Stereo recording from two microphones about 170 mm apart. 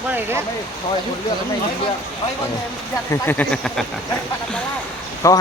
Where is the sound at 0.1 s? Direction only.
15° right (ahead or behind).